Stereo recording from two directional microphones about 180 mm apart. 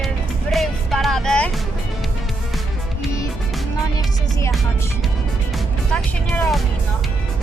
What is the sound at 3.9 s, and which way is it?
Music, 15° left (ahead or behind).